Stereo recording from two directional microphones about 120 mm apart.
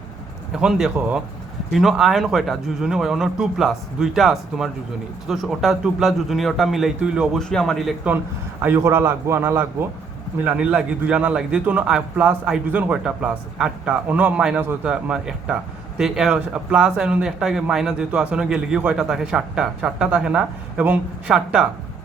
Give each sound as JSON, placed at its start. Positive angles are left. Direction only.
{"t": 0.5, "sound": "speech", "side_deg": -5}
{"t": 7.5, "sound": "speech", "side_deg": 5}
{"t": 8.6, "sound": "a man's voice", "side_deg": -15}